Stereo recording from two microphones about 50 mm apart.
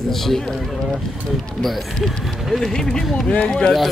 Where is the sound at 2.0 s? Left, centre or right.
Centre.